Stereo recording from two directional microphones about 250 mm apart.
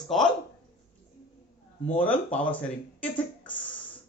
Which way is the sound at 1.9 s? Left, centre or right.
Centre.